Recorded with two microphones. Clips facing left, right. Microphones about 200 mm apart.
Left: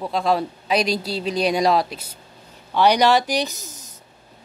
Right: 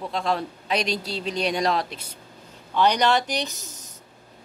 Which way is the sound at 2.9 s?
10° left (ahead or behind).